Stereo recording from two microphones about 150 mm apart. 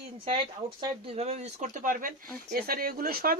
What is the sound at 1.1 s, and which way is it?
Speech, 45° right (ahead or behind).